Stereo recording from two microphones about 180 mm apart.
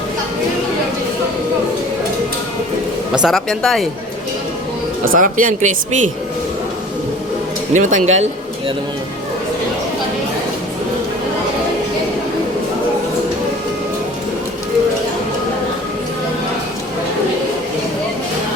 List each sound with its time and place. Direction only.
3.1 s speech: centre (ahead or behind)
5.1 s speech: 45° right (ahead or behind)
7.7 s speech: 45° right (ahead or behind)